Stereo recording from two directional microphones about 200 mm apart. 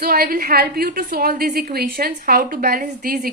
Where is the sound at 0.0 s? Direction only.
50° right (ahead or behind).